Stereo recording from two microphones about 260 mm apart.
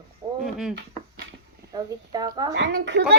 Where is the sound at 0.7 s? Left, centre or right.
Right.